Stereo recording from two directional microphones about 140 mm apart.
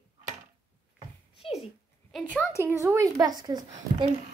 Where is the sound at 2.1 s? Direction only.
Centre (ahead or behind).